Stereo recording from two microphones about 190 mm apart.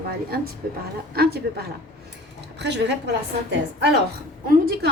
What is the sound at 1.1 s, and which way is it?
A woman's voice, 55° right (ahead or behind).